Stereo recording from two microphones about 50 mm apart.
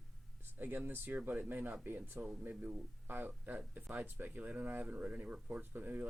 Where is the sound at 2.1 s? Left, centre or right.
Right.